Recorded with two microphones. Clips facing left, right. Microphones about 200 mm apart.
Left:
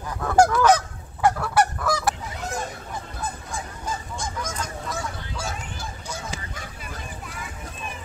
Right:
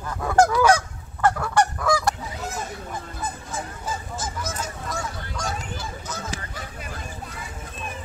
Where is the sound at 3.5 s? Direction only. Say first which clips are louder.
Right 1 dB; 5° right (ahead or behind).